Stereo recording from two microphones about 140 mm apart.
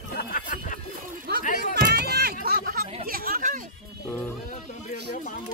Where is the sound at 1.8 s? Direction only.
90° right.